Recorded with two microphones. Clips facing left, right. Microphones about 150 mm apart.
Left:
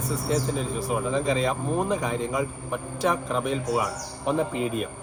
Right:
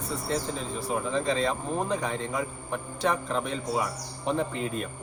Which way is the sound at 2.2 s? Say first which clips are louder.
Left 4 dB; 15° left (ahead or behind).